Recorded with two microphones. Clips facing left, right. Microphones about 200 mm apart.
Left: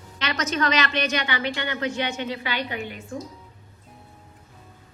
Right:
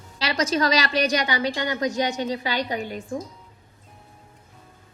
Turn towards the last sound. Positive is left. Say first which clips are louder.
# right 3 dB
turn(degrees=-40)  # may be behind; listen again after turning